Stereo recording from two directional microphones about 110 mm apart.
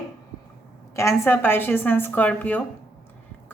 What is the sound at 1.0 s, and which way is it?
A woman's voice, 25° left (ahead or behind).